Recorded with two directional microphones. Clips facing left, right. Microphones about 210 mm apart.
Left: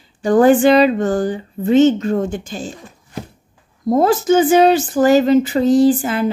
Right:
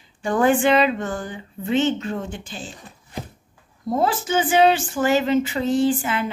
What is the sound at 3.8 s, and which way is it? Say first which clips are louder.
A woman's voice: left 8 dB; 45° left (ahead or behind).